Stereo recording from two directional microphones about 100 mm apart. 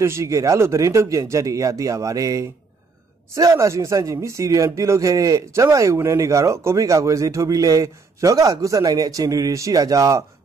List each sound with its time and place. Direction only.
0.0 s speech: 30° right (ahead or behind)